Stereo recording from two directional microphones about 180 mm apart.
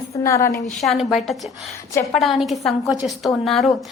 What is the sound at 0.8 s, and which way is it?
Speech, centre (ahead or behind).